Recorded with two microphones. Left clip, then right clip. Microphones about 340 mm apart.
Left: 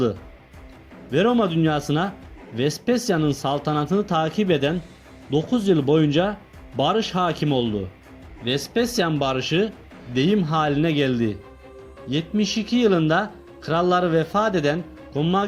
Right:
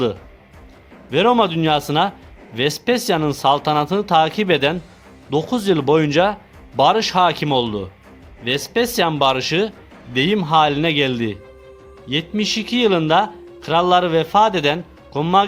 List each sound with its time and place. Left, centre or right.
1.1 s speech: centre